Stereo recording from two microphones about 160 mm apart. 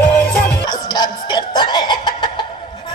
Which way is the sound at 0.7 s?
25° left (ahead or behind).